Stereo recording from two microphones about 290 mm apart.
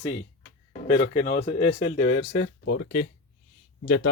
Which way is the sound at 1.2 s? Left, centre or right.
Left.